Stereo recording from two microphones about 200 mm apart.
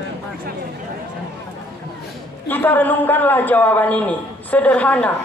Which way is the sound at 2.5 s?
10° left (ahead or behind).